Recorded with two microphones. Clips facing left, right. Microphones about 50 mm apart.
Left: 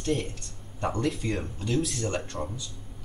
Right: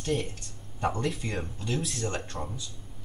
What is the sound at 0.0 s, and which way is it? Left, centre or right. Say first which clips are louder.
Speech: left 1 dB; centre.